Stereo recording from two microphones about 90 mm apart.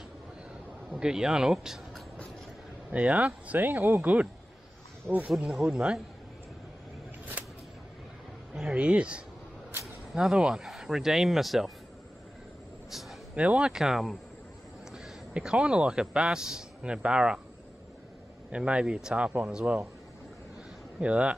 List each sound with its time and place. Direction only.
0.9 s speech: 10° right (ahead or behind)
2.9 s speech: 15° right (ahead or behind)
5.1 s speech: 10° left (ahead or behind)
5.4 s speech: 10° right (ahead or behind)
8.5 s speech: 10° right (ahead or behind)
13.3 s a man's voice: 15° right (ahead or behind)
18.5 s speech: 10° right (ahead or behind)
21.0 s speech: 10° right (ahead or behind)